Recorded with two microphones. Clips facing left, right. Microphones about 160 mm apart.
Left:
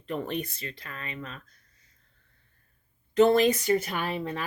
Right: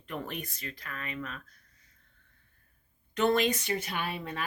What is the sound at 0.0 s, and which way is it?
Speech, 35° left (ahead or behind).